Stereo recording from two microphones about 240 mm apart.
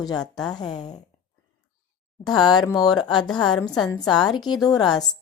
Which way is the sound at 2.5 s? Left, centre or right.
Centre.